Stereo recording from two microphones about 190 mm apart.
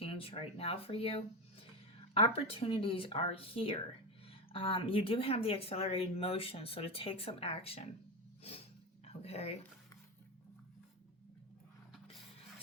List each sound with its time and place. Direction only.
0.0 s speech: 30° left (ahead or behind)
9.2 s speech: 35° left (ahead or behind)